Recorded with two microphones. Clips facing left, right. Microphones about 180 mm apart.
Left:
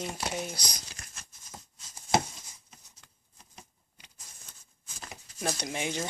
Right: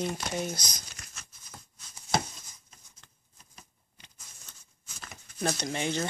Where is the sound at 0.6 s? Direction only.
30° left (ahead or behind).